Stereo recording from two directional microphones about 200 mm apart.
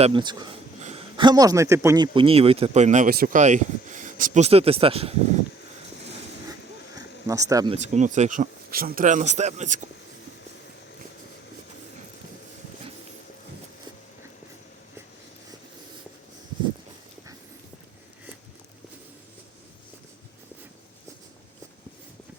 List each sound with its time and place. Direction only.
0.0 s a man's voice: 25° right (ahead or behind)
2.1 s speech: 30° right (ahead or behind)
6.9 s a sound: 15° right (ahead or behind)
7.7 s speech: 35° right (ahead or behind)